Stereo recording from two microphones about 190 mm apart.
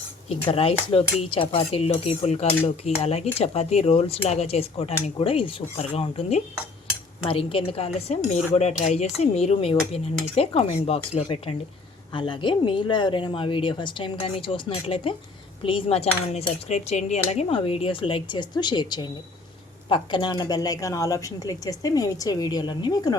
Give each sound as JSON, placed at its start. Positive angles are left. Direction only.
{"t": 0.3, "sound": "speech", "side_deg": 30}
{"t": 12.1, "sound": "cutlery", "side_deg": 25}